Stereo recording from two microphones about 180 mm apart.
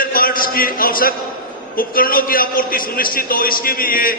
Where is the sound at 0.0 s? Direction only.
50° left (ahead or behind).